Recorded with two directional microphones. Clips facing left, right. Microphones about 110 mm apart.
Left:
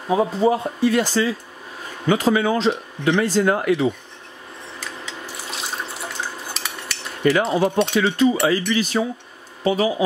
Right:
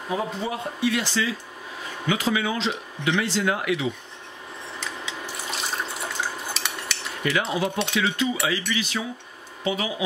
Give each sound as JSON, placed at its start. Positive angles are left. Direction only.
{"t": 0.4, "sound": "speech", "side_deg": 40}
{"t": 4.7, "sound": "water", "side_deg": 0}
{"t": 7.2, "sound": "speech", "side_deg": 40}